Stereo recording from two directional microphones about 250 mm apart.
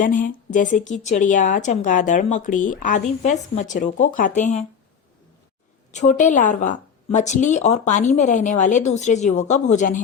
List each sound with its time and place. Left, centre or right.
0.0 s a woman's voice: left
5.9 s speech: left